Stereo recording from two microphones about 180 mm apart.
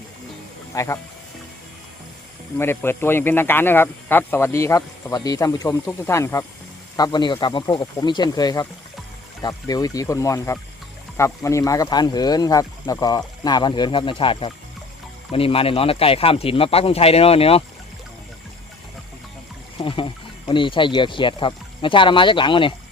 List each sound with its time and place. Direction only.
0.7 s speech: 15° left (ahead or behind)
2.6 s speech: 15° left (ahead or behind); by 17.6 s 35° left (ahead or behind)
19.8 s speech: 30° left (ahead or behind)